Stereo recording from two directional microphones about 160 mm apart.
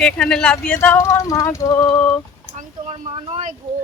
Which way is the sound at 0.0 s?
5° left (ahead or behind).